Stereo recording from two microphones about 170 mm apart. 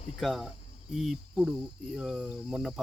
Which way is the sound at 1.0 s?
Centre (ahead or behind).